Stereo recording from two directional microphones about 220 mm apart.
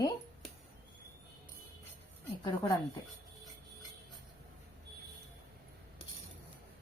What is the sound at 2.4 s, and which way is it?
Speech, 20° left (ahead or behind).